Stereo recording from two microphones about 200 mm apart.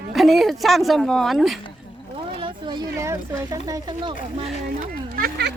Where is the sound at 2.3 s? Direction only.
25° right (ahead or behind).